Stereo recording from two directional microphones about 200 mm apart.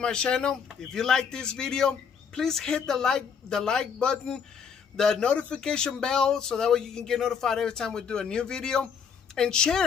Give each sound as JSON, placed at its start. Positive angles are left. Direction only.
{"t": 0.0, "sound": "a man's voice", "side_deg": 5}